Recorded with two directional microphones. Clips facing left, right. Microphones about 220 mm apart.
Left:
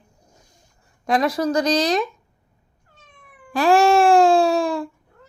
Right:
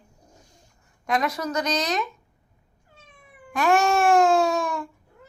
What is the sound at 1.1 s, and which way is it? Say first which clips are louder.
Speech: left 6 dB; 30° left (ahead or behind).